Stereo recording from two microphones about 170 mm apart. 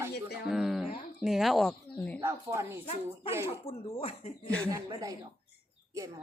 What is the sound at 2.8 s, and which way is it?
Speech, 35° left (ahead or behind).